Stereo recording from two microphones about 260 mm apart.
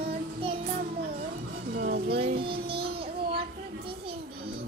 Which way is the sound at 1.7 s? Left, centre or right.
Right.